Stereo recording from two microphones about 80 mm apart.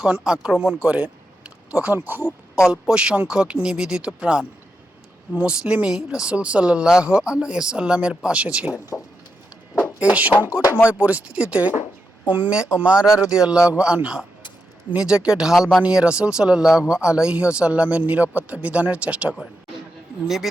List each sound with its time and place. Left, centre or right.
0.0 s a man's voice: centre
0.9 s a sound: centre
1.8 s speech: right
2.6 s a man's voice: centre
10.0 s a man's voice: centre
20.2 s speech: centre